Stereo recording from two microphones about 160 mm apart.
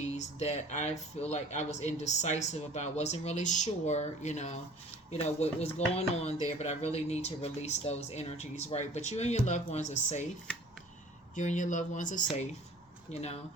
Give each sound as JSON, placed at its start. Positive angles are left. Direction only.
{"t": 0.0, "sound": "speech", "side_deg": 45}
{"t": 11.3, "sound": "speech", "side_deg": 50}